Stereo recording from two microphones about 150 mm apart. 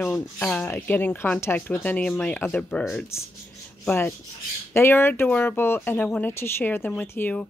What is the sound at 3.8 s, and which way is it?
Rub, 10° left (ahead or behind).